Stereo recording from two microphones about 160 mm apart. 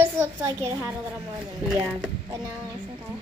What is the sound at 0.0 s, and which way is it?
Speech, 15° right (ahead or behind).